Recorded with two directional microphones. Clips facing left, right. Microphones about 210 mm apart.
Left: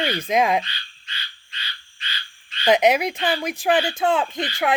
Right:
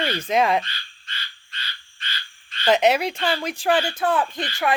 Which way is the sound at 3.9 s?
25° left (ahead or behind).